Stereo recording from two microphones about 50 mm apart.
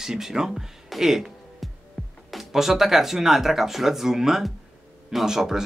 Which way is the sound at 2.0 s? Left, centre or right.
Centre.